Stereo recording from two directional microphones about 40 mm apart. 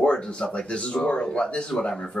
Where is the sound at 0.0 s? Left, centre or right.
Left.